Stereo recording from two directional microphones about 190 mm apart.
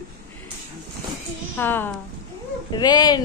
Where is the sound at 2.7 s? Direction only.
20° left (ahead or behind).